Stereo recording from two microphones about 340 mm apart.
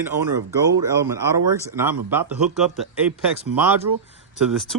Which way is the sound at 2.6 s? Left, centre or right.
Centre.